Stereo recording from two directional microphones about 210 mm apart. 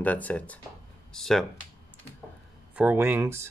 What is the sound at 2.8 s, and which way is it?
Speech, 10° right (ahead or behind).